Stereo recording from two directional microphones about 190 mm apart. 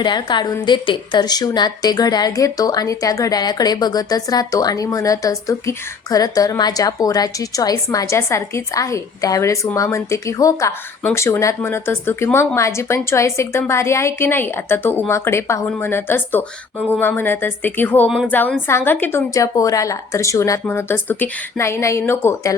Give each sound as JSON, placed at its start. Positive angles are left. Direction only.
{"t": 0.0, "sound": "a woman's voice", "side_deg": 25}